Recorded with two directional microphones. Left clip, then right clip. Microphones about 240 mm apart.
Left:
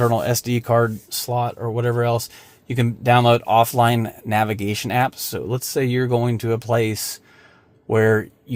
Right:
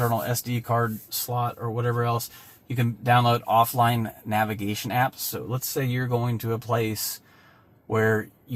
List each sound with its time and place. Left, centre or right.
0.0 s speech: left